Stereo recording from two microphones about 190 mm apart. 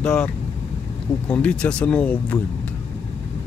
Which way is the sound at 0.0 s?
5° left (ahead or behind).